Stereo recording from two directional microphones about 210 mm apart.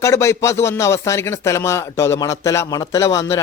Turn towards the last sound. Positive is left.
turn(degrees=15)  # may be behind; listen again after turning